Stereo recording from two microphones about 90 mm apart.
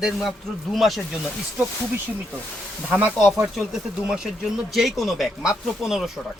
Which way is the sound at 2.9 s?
10° right (ahead or behind).